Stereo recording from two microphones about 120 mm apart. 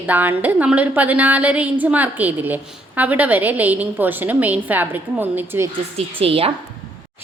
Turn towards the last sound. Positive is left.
turn(degrees=-50)  # may be behind; listen again after turning